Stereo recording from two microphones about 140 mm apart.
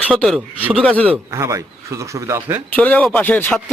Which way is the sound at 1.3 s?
20° right (ahead or behind).